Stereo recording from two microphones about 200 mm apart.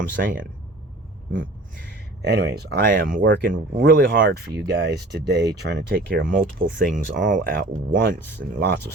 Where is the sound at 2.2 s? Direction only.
55° right (ahead or behind).